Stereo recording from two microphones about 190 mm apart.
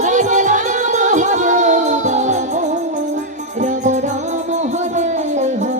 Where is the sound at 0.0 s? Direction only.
40° right (ahead or behind).